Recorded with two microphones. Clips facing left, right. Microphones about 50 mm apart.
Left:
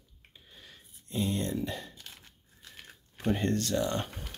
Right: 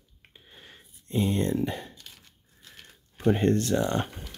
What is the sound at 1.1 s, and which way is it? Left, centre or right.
Speech, right.